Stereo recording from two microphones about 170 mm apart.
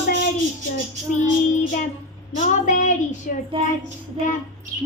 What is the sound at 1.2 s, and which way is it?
Child singing, 45° left (ahead or behind).